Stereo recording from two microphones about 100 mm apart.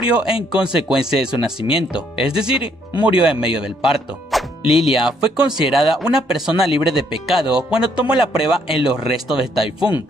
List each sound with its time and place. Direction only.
0.1 s speech: 10° right (ahead or behind)